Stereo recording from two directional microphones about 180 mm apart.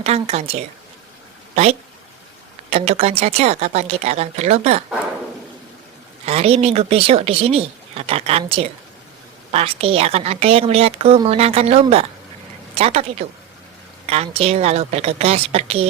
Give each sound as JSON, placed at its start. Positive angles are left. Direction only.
{"t": 0.0, "sound": "a woman's voice", "side_deg": -35}
{"t": 2.6, "sound": "a woman's voice", "side_deg": -35}
{"t": 6.2, "sound": "a woman's voice", "side_deg": -35}